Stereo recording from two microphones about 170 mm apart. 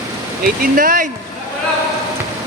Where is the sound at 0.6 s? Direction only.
55° right (ahead or behind).